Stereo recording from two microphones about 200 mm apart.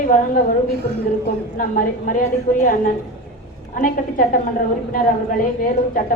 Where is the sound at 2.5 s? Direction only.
40° left (ahead or behind).